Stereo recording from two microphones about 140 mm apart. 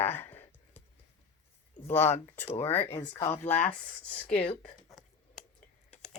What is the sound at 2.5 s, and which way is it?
Speech, 50° left (ahead or behind).